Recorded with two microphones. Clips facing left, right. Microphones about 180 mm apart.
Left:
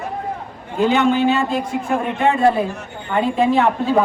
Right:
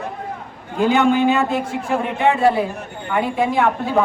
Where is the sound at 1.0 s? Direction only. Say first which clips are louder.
Even; 55° right (ahead or behind).